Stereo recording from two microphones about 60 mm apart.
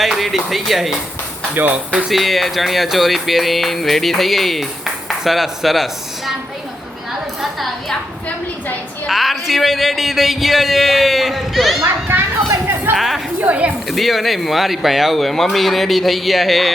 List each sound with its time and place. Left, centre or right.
0.0 s speech: centre
1.5 s speech: right
2.0 s music: centre
9.0 s music: centre
13.0 s music: centre
13.4 s speech: right
13.8 s music: centre